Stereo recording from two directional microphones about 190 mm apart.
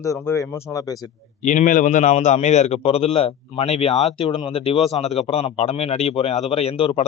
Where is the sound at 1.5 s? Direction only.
40° left (ahead or behind).